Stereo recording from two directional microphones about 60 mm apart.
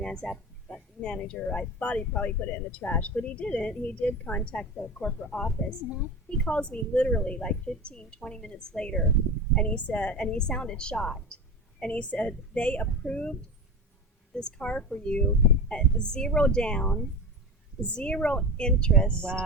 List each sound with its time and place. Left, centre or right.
0.0 s a woman's voice: centre
14.3 s a woman's voice: centre